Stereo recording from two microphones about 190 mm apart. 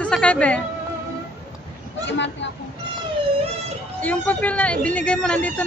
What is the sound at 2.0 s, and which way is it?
Speech, 70° left (ahead or behind).